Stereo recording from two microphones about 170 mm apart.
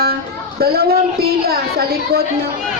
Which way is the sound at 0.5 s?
65° right (ahead or behind).